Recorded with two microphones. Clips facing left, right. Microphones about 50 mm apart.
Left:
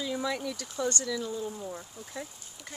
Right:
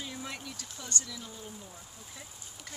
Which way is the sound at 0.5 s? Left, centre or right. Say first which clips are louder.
Left 11 dB; left.